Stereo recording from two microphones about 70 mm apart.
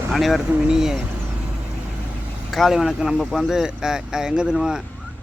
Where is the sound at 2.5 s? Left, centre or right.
Centre.